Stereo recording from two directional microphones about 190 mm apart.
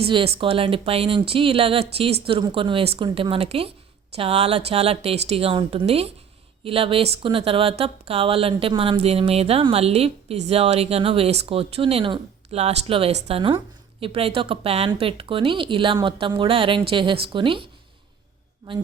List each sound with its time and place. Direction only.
0.3 s speech: 30° right (ahead or behind)